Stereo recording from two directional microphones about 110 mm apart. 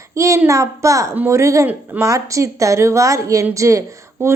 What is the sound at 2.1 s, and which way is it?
A woman's voice, 30° right (ahead or behind).